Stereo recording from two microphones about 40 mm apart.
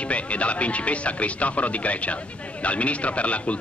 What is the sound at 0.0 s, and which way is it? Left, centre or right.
Speech, left.